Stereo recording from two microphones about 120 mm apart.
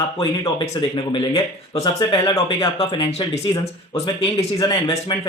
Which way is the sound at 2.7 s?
45° left (ahead or behind).